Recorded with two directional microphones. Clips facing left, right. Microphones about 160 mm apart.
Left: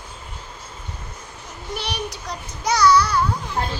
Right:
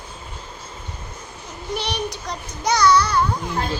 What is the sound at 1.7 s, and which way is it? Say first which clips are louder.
A child's voice: right 3 dB; 5° left (ahead or behind).